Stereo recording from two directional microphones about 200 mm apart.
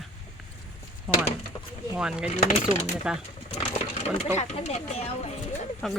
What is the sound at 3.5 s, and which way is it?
Speech, 30° left (ahead or behind).